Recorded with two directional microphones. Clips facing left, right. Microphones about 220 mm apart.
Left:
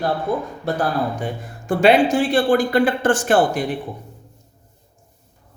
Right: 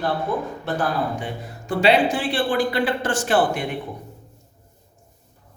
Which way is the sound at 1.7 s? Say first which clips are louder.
Left 4 dB; 50° left (ahead or behind).